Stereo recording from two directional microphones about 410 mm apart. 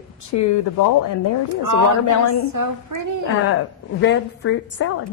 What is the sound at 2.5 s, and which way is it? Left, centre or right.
Speech, right.